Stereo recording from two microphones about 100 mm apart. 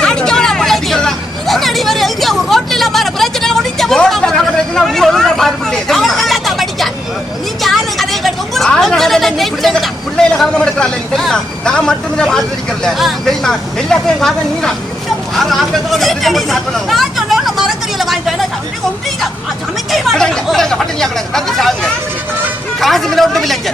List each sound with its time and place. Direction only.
0.0 s hubbub: 10° left (ahead or behind)
7.6 s a sound: centre (ahead or behind)
10.3 s a man's voice: 5° left (ahead or behind)
15.4 s chatter: centre (ahead or behind)
19.9 s chatter: 5° left (ahead or behind)
22.8 s speech: centre (ahead or behind)